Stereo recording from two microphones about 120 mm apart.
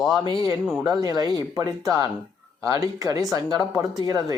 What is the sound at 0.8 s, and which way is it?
Speech, 35° right (ahead or behind).